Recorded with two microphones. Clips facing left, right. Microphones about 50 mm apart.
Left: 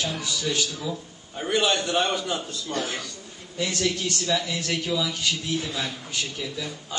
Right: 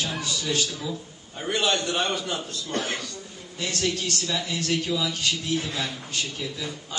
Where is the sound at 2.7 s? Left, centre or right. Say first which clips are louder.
Right 1 dB; right.